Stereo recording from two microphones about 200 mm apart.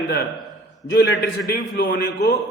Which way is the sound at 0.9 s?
55° left (ahead or behind).